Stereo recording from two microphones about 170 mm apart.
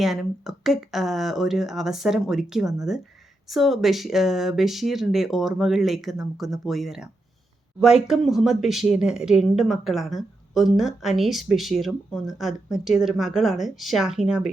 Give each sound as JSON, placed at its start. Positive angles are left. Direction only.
{"t": 0.0, "sound": "speech", "side_deg": 0}